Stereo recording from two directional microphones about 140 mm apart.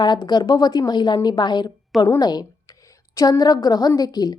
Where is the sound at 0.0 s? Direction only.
30° left (ahead or behind).